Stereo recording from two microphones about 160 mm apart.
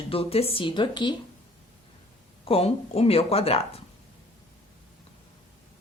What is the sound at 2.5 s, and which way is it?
Speech, 35° left (ahead or behind).